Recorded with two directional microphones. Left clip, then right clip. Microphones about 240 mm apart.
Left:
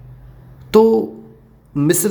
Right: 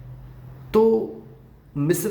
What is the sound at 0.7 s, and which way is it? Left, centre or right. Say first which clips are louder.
Speech: left 6 dB; left.